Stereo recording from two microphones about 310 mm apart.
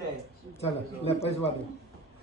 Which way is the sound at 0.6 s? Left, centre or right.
Centre.